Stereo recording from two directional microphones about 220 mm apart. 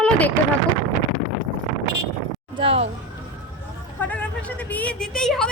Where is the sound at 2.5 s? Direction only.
25° right (ahead or behind).